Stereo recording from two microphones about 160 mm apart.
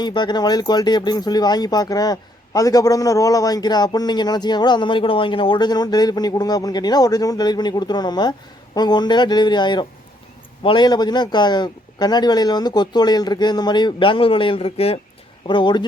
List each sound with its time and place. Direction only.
0.0 s speech: 25° left (ahead or behind)